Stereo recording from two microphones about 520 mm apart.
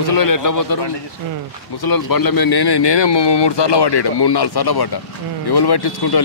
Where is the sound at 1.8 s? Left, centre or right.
Left.